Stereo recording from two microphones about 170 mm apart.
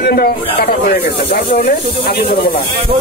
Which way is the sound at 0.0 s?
65° left (ahead or behind).